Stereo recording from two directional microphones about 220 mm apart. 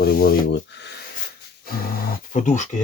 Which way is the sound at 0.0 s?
45° left (ahead or behind).